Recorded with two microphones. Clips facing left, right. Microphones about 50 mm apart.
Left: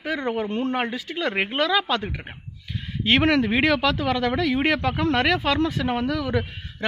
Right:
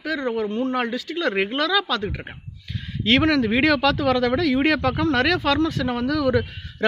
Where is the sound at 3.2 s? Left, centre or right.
Left.